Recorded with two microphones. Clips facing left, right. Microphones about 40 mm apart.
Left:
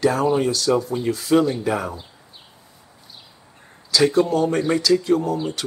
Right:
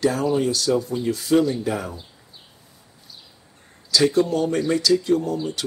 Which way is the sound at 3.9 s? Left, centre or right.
Centre.